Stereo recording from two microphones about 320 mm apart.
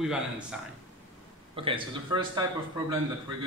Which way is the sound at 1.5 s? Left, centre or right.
Centre.